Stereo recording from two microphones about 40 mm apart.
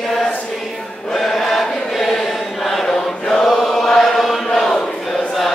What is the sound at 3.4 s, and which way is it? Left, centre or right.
Chant, centre.